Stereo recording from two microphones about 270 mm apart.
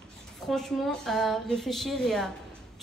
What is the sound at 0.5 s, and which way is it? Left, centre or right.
Speech, centre.